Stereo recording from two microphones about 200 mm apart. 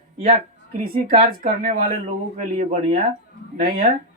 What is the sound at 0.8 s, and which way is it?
Speech, 45° right (ahead or behind).